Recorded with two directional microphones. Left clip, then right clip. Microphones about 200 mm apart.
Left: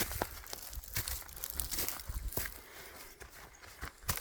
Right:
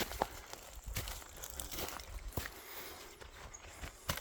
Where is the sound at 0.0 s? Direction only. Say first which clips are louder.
Even; 50° left (ahead or behind).